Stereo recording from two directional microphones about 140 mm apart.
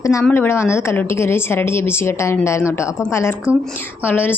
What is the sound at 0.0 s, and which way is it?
A woman's voice, 20° left (ahead or behind).